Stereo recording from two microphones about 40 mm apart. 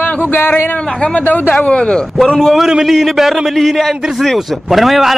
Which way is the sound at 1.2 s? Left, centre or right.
Left.